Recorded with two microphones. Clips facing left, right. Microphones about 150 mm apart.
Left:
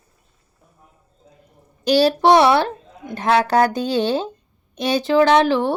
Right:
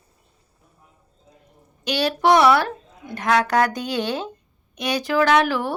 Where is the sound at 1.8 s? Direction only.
35° left (ahead or behind).